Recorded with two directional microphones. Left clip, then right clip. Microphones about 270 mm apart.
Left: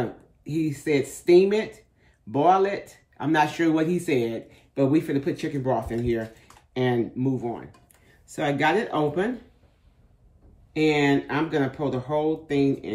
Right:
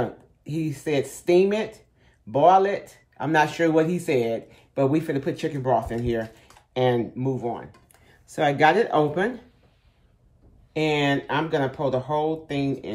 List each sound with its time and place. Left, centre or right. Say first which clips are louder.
0.0 s speech: right 2 dB; centre
10.7 s speech: left 1 dB; centre